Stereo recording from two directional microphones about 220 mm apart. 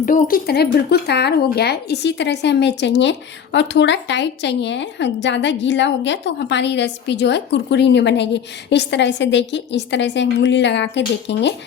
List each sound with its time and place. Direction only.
0.0 s a woman's voice: 40° left (ahead or behind)